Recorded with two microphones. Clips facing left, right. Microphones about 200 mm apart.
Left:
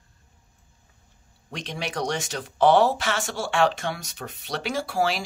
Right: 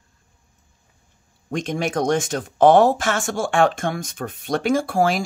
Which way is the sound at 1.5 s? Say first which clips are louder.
Right 9 dB; 50° right (ahead or behind).